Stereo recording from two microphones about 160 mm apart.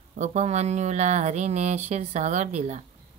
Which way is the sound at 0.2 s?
45° right (ahead or behind).